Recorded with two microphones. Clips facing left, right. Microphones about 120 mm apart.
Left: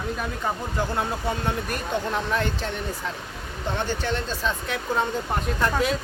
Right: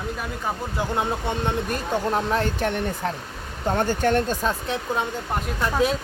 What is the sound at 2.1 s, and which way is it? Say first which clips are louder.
Speech: right 4 dB; 35° right (ahead or behind).